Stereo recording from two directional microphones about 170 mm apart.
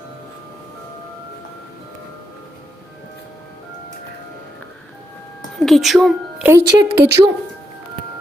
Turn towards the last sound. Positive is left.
turn(degrees=-20)  # may be behind; listen again after turning